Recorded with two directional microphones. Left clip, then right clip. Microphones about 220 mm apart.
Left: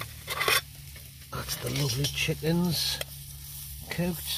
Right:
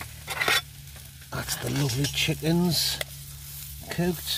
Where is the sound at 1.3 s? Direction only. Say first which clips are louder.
Right 3 dB; 35° right (ahead or behind).